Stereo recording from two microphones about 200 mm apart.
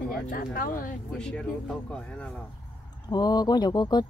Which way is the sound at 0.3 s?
45° left (ahead or behind).